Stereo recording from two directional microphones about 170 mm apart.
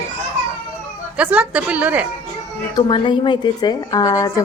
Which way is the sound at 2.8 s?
30° left (ahead or behind).